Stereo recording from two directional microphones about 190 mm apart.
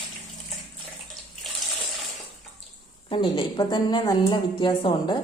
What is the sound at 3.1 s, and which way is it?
A woman's voice, 25° left (ahead or behind).